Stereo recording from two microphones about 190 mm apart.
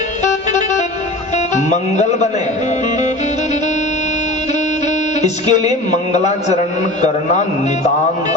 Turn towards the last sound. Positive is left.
turn(degrees=35)  # may be behind; listen again after turning